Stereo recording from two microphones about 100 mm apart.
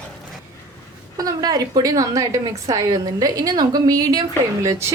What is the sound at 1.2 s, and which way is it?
A woman's voice, 40° right (ahead or behind).